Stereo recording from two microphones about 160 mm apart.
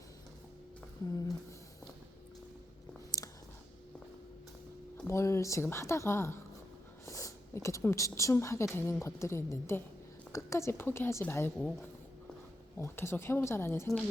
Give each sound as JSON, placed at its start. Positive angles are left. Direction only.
{"t": 3.2, "sound": "clicking", "side_deg": 20}
{"t": 5.0, "sound": "a woman's voice", "side_deg": 15}
{"t": 12.8, "sound": "a woman's voice", "side_deg": 15}